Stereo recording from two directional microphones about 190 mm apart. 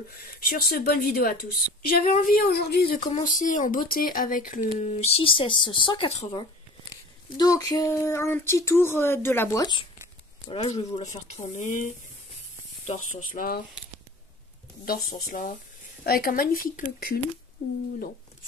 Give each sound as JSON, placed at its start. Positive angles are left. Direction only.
{"t": 0.1, "sound": "speech", "side_deg": 50}
{"t": 3.2, "sound": "speech", "side_deg": 40}
{"t": 7.3, "sound": "speech", "side_deg": 20}
{"t": 10.5, "sound": "speech", "side_deg": 35}
{"t": 14.9, "sound": "speech", "side_deg": 50}